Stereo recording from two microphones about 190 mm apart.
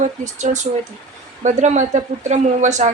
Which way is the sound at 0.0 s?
40° right (ahead or behind).